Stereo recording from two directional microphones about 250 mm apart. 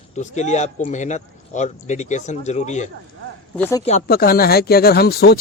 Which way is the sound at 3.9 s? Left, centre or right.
Left.